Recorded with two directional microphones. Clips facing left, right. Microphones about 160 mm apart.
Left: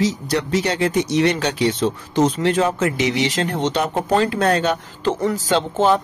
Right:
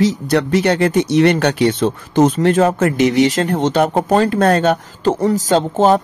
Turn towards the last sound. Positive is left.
turn(degrees=-45)  # may be behind; listen again after turning